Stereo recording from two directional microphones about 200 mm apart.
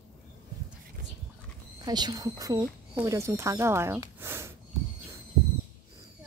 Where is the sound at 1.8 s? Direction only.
20° right (ahead or behind).